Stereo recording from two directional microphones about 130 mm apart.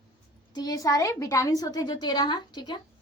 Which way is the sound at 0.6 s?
30° left (ahead or behind).